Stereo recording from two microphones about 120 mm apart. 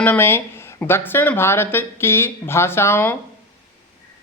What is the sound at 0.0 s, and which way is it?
Speech, 15° left (ahead or behind).